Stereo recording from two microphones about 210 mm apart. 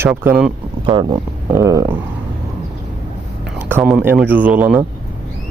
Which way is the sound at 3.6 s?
10° right (ahead or behind).